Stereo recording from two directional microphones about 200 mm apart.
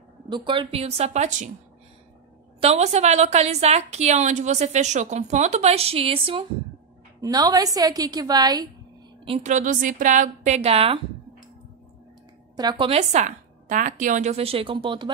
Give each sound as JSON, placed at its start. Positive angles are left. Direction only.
{"t": 0.5, "sound": "a woman's voice", "side_deg": -25}
{"t": 2.6, "sound": "a woman's voice", "side_deg": -35}
{"t": 9.2, "sound": "a woman's voice", "side_deg": -30}
{"t": 12.5, "sound": "a woman's voice", "side_deg": -25}